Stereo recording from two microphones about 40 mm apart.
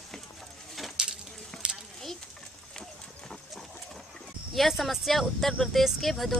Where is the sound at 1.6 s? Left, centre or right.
Right.